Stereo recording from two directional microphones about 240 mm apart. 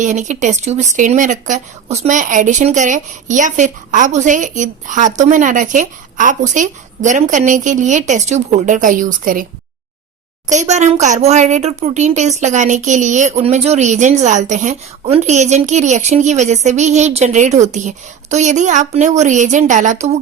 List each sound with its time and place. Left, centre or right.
0.0 s speech: right
10.5 s speech: right